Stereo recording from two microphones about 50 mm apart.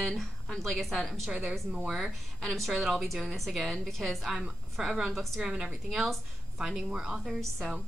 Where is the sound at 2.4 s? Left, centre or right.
Centre.